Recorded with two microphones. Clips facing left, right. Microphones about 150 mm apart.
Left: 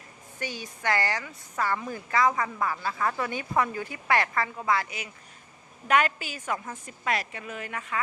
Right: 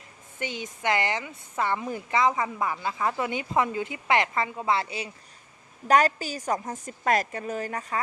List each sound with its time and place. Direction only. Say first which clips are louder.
0.3 s a woman's voice: right 2 dB; 20° right (ahead or behind); by 8.0 s 35° right (ahead or behind)